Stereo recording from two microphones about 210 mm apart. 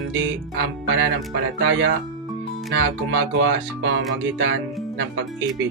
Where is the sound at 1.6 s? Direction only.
60° right (ahead or behind).